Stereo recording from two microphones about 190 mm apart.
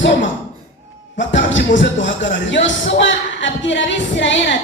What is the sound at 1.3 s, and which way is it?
Music, 75° left (ahead or behind).